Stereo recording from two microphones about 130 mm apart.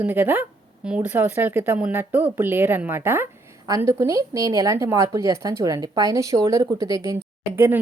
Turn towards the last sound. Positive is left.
turn(degrees=-15)  # may be behind; listen again after turning